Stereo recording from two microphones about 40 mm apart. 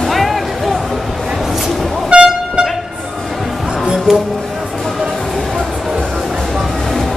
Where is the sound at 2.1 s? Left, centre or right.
Right.